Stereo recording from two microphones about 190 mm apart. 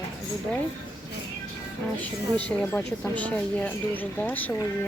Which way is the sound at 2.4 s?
5° left (ahead or behind).